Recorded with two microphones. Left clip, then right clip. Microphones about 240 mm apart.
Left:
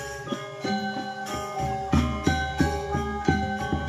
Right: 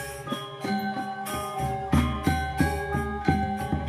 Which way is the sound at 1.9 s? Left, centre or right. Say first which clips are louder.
Left 1 dB; right.